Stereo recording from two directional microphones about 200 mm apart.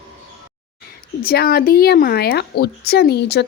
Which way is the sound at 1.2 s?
50° left (ahead or behind).